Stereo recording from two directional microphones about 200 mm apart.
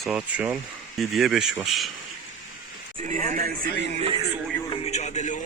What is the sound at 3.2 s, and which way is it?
Speech, 40° right (ahead or behind).